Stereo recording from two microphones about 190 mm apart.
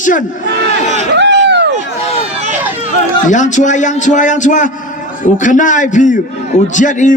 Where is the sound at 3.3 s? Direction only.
40° left (ahead or behind).